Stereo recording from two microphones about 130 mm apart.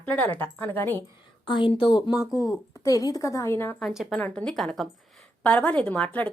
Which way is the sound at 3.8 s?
Centre (ahead or behind).